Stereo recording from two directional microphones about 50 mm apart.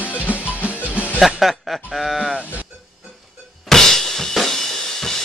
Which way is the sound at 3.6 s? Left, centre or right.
Centre.